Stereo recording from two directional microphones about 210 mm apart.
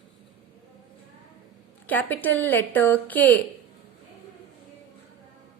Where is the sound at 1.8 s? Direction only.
10° left (ahead or behind).